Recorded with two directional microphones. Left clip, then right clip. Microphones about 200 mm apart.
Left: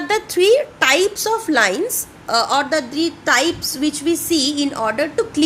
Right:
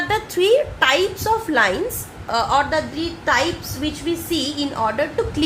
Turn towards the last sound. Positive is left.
turn(degrees=40)  # may be behind; listen again after turning